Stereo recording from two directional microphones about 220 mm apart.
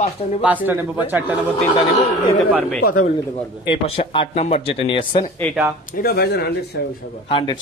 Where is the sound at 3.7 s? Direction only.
25° left (ahead or behind).